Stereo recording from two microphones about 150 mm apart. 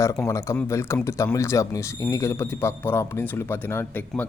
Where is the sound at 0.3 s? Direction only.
20° left (ahead or behind).